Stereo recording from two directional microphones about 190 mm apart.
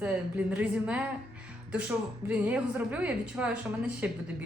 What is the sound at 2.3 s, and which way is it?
Speech, 5° right (ahead or behind).